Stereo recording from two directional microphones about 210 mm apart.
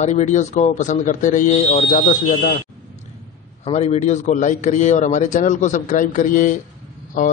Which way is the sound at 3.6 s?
30° left (ahead or behind).